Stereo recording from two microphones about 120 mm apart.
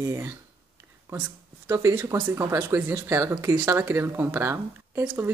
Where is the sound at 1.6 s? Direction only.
25° right (ahead or behind).